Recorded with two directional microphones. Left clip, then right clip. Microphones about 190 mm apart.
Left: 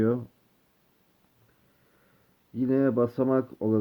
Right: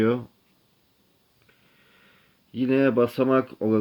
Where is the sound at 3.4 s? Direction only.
25° right (ahead or behind).